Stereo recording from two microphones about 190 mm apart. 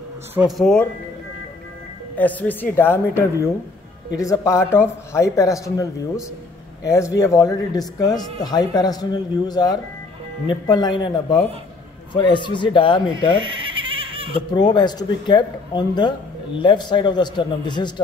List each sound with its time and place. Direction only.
0.3 s speech: 5° right (ahead or behind)
2.1 s speech: 10° left (ahead or behind); by 13.1 s 25° left (ahead or behind)
13.1 s giggle: 25° right (ahead or behind)
14.5 s speech: 20° left (ahead or behind)